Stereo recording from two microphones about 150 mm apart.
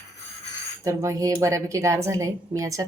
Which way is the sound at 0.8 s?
20° right (ahead or behind).